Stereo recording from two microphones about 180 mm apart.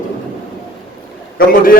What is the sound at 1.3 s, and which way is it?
Speech, 55° left (ahead or behind).